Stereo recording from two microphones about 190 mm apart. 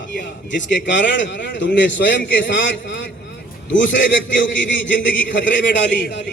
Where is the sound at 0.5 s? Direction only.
70° left (ahead or behind).